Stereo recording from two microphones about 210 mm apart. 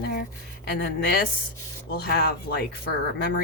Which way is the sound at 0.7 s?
50° left (ahead or behind).